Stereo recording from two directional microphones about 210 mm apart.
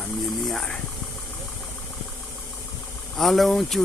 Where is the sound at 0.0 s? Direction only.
Centre (ahead or behind).